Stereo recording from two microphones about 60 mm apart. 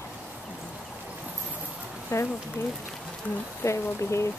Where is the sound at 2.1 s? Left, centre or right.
Left.